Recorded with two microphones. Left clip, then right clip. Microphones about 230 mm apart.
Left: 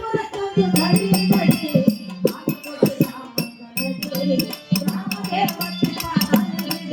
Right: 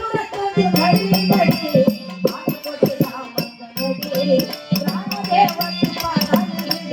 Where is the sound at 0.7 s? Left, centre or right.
Centre.